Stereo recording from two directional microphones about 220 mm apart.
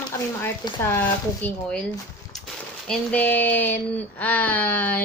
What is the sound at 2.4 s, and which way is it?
Speech, centre (ahead or behind).